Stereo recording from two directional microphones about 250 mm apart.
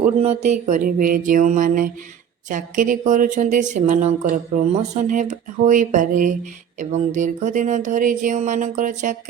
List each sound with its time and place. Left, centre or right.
0.2 s mantra: right
6.7 s speech: right